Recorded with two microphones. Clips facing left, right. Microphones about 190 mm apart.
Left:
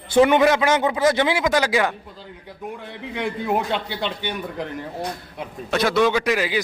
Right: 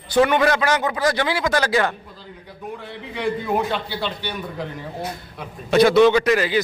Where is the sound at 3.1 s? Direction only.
20° left (ahead or behind).